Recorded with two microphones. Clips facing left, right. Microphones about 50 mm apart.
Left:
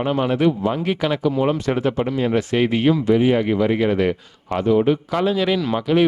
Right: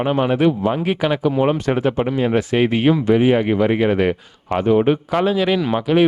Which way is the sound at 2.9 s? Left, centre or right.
Right.